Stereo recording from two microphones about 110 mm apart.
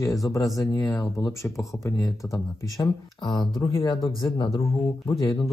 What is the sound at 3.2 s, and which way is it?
Speech, 40° left (ahead or behind).